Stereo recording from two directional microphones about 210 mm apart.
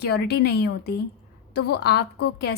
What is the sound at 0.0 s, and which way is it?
A woman's voice, 50° left (ahead or behind).